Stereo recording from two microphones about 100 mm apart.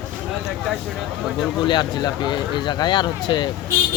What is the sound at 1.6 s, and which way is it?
Speech, 50° left (ahead or behind).